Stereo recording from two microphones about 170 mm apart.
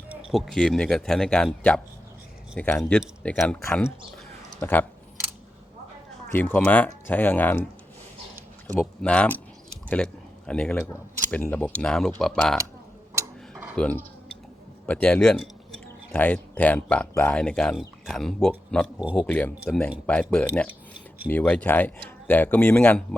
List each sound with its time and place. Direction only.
0.1 s speech: centre (ahead or behind)
6.3 s speech: 10° left (ahead or behind)
8.7 s speech: 5° left (ahead or behind)
13.7 s speech: 5° left (ahead or behind)
18.9 s speech: 5° right (ahead or behind)
19.2 s speech: 10° left (ahead or behind)